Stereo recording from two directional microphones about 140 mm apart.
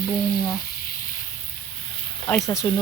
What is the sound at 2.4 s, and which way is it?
Speech, 20° left (ahead or behind).